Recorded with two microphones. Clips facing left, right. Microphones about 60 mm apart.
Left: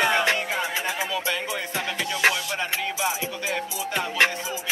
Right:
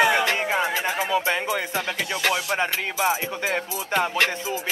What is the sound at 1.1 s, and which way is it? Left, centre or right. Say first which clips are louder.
Speech: right 5 dB; right.